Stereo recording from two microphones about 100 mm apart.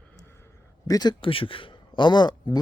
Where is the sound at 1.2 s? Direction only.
60° left (ahead or behind); by 2.6 s 45° left (ahead or behind).